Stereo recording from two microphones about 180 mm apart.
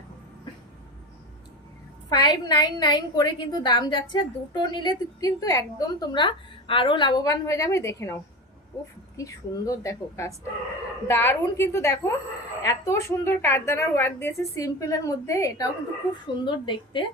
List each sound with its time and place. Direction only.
2.0 s a woman's voice: 25° left (ahead or behind)